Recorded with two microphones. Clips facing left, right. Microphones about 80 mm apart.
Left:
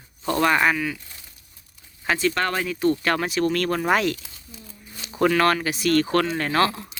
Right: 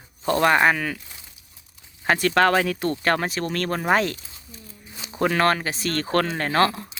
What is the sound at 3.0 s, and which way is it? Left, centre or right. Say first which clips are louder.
Speech: left 1 dB; right.